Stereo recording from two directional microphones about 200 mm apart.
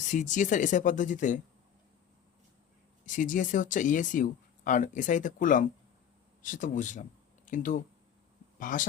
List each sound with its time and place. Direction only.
0.1 s speech: 40° left (ahead or behind)
3.1 s speech: 40° left (ahead or behind)